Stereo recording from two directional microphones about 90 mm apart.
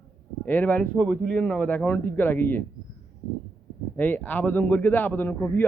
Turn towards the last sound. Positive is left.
turn(degrees=25)  # may be behind; listen again after turning